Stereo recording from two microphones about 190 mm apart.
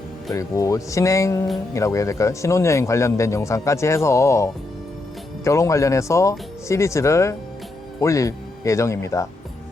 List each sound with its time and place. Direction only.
0.3 s speech: 15° left (ahead or behind)